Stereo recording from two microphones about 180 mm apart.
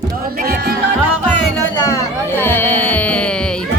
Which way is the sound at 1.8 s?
15° left (ahead or behind).